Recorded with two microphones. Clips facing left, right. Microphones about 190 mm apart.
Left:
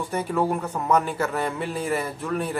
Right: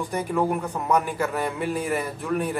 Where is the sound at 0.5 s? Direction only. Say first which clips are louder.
Left 1 dB; 15° right (ahead or behind).